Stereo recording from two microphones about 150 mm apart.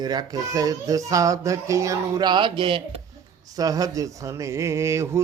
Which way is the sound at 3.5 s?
25° right (ahead or behind).